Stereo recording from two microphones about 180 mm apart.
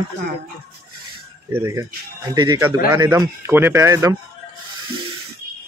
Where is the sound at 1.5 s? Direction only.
15° right (ahead or behind).